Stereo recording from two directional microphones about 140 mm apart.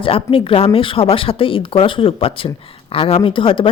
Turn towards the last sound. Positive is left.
turn(degrees=40)  # may be behind; listen again after turning